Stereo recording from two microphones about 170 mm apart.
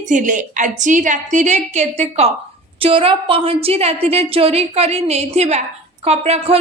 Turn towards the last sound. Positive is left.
turn(degrees=-40)  # may be behind; listen again after turning